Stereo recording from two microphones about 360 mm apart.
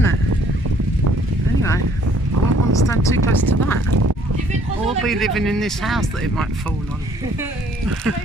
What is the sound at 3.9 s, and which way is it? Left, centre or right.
Speech, right.